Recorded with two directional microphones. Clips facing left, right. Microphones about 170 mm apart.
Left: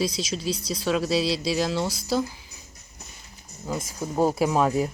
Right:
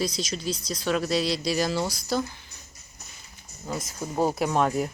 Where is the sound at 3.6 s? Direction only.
Centre (ahead or behind).